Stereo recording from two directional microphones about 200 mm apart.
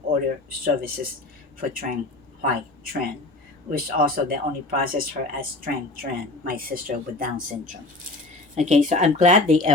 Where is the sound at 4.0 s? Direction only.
45° right (ahead or behind).